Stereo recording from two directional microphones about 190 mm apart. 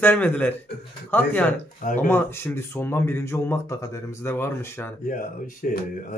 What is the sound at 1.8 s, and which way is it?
Speech, 45° left (ahead or behind).